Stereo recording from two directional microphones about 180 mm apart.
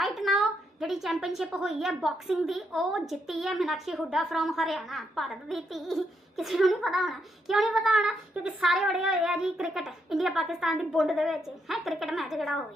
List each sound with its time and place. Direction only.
0.0 s a woman's voice: centre (ahead or behind)